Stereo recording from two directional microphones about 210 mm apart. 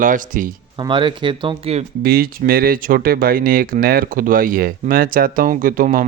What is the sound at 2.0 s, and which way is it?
Speech, 45° right (ahead or behind).